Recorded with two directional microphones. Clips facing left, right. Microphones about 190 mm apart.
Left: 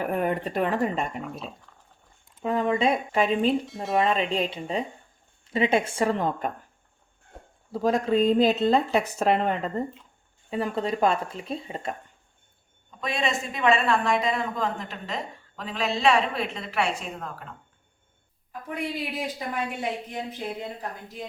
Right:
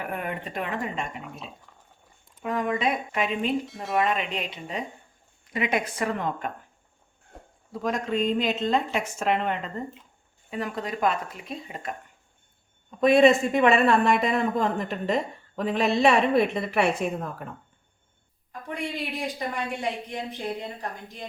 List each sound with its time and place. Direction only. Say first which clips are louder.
0.0 s speech: left 6 dB; 40° left (ahead or behind)
1.7 s dog: right 1 dB; 10° right (ahead or behind)
2.4 s speech: left 3 dB; 25° left (ahead or behind)
3.7 s speech: left 3 dB; centre (ahead or behind)
4.0 s speech: left 3 dB; 30° left (ahead or behind)
7.3 s a sound: left 1 dB; centre (ahead or behind)
7.7 s speech: left 5 dB; 35° left (ahead or behind)
13.0 s a woman's voice: right 11 dB; 55° right (ahead or behind)
18.7 s speech: left 1 dB; 5° left (ahead or behind)